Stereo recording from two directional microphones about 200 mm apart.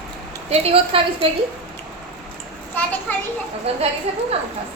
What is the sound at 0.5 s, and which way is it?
Speech, 30° right (ahead or behind).